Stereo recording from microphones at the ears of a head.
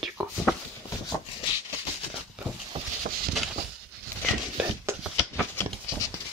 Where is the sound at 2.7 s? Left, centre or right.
Right.